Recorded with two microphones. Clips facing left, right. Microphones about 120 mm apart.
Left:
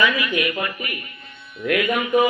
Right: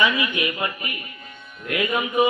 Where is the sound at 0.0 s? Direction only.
25° right (ahead or behind).